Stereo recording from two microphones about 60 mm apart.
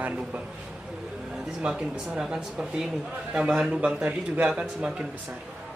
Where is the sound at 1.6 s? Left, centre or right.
Centre.